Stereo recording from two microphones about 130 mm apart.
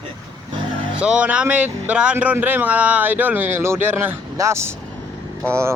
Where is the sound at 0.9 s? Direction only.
10° right (ahead or behind).